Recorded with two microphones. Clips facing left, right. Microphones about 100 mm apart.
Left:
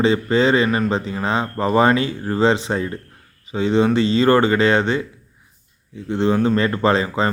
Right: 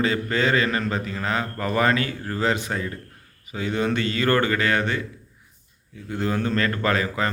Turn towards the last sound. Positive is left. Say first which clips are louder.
# left 5 dB
turn(degrees=25)  # may be behind; listen again after turning